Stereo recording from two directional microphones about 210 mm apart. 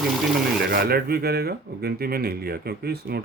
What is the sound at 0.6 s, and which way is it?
Speech, 45° right (ahead or behind).